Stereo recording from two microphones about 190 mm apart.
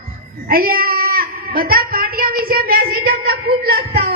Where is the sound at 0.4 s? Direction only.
50° right (ahead or behind).